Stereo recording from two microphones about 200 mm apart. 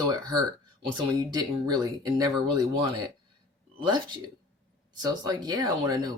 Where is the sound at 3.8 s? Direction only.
20° right (ahead or behind).